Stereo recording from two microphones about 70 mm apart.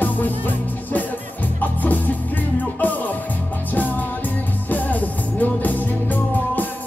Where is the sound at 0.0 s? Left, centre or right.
Left.